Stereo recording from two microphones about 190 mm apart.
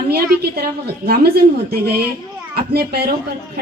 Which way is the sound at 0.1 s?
55° right (ahead or behind).